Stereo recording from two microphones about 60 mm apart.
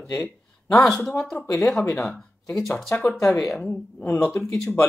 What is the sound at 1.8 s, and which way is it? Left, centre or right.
Speech, left.